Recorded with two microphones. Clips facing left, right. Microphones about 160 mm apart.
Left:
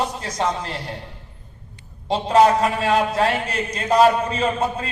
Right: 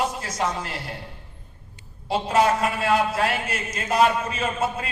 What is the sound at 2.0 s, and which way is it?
A man's voice, 35° left (ahead or behind).